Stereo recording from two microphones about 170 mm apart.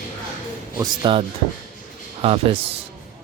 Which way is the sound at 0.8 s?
25° right (ahead or behind).